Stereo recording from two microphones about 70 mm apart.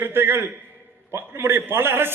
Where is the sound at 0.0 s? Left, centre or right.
Right.